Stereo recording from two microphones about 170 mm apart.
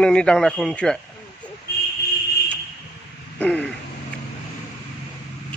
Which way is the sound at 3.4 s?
10° left (ahead or behind).